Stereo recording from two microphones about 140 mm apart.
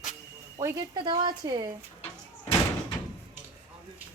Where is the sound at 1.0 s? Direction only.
30° right (ahead or behind).